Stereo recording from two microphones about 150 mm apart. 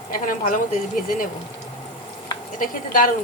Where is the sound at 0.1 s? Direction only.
65° left (ahead or behind).